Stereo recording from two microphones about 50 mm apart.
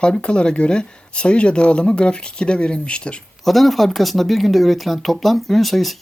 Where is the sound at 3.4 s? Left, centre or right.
Centre.